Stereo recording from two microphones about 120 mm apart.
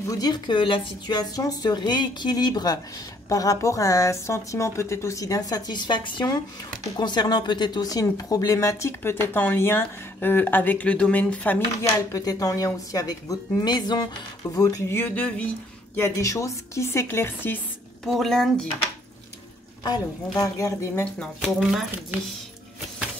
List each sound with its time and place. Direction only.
0.0 s a woman's voice: 30° left (ahead or behind); by 11.6 s 15° left (ahead or behind)
12.1 s speech: 30° left (ahead or behind); by 15.4 s 10° left (ahead or behind)
16.0 s speech: 25° left (ahead or behind)
18.0 s speech: 5° left (ahead or behind)
19.8 s speech: 30° left (ahead or behind)
21.2 s speech: 5° right (ahead or behind)